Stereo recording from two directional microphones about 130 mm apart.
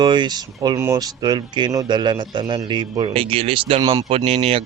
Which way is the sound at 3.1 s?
45° right (ahead or behind).